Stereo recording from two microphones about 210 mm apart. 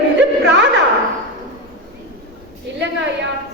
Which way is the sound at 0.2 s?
55° right (ahead or behind).